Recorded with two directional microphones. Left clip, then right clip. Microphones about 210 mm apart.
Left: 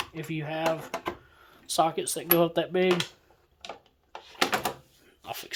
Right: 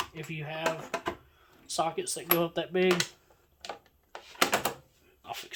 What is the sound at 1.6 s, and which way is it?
Speech, 50° left (ahead or behind).